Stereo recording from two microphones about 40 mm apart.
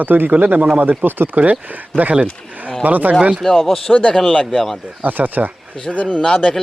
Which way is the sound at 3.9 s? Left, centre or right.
Centre.